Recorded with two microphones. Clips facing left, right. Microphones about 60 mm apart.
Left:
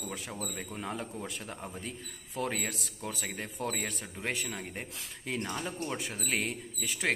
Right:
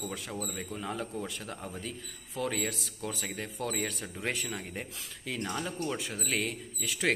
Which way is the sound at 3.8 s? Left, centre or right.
Centre.